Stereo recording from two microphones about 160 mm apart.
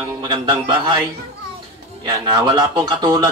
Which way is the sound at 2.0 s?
30° right (ahead or behind).